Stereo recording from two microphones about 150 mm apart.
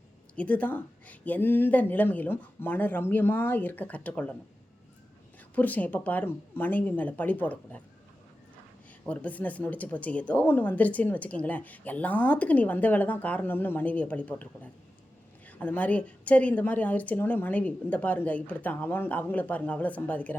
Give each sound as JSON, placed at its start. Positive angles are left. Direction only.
{"t": 0.3, "sound": "speech", "side_deg": 10}
{"t": 5.5, "sound": "speech", "side_deg": 10}
{"t": 9.0, "sound": "speech", "side_deg": 10}